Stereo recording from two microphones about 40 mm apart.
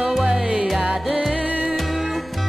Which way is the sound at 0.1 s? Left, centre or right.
Centre.